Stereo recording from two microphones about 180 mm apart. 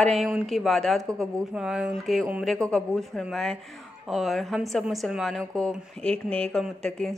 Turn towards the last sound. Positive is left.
turn(degrees=0)  # may be behind; listen again after turning